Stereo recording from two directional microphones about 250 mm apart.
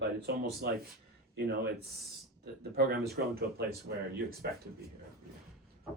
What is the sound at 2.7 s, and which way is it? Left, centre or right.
Speech, right.